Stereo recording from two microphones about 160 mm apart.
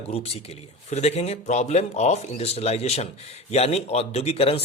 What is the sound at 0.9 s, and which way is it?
Speech, 45° left (ahead or behind).